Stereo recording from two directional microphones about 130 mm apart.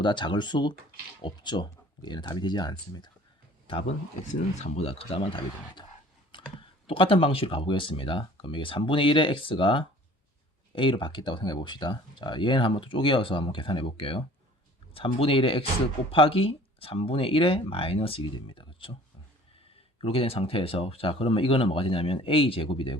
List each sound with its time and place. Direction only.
0.0 s speech: 35° left (ahead or behind)
3.7 s speech: 45° left (ahead or behind)
4.3 s speech: 60° left (ahead or behind); by 5.8 s 40° left (ahead or behind)
6.3 s clicking: 40° left (ahead or behind)
6.8 s speech: 45° left (ahead or behind)
20.0 s speech: 45° left (ahead or behind)